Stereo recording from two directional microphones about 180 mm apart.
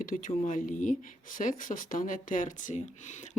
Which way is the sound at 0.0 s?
50° left (ahead or behind).